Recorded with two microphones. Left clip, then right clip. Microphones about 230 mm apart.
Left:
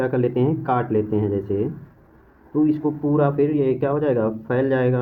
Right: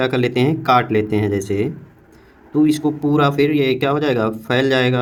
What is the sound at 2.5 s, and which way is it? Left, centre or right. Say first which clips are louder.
Speech: right 4 dB; right.